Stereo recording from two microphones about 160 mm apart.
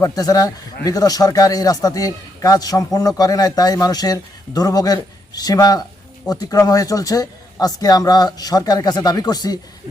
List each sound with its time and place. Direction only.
0.0 s a man's voice: 20° left (ahead or behind)